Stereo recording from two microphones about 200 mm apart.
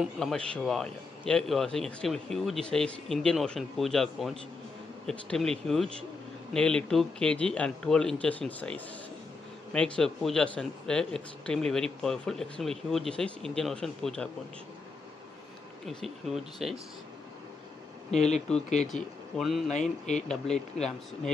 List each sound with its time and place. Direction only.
0.0 s speech: centre (ahead or behind)
15.8 s speech: centre (ahead or behind)
18.1 s speech: 35° left (ahead or behind)
18.9 s speech: centre (ahead or behind)